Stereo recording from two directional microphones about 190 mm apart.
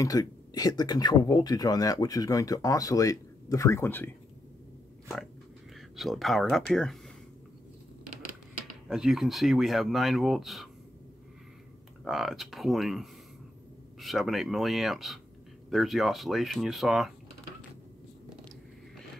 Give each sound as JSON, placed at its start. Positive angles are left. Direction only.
{"t": 0.0, "sound": "speech", "side_deg": 20}
{"t": 5.9, "sound": "speech", "side_deg": 0}
{"t": 8.8, "sound": "speech", "side_deg": -5}
{"t": 12.0, "sound": "speech", "side_deg": 0}